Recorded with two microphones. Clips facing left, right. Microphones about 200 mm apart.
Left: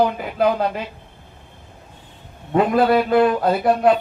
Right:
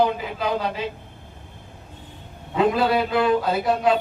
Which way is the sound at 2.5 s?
55° left (ahead or behind).